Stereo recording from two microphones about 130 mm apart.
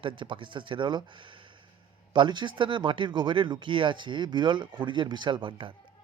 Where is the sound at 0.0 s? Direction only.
40° right (ahead or behind).